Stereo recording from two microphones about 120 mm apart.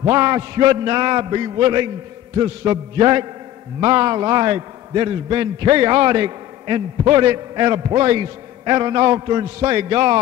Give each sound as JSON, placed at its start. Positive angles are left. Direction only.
{"t": 0.0, "sound": "a man's voice", "side_deg": -35}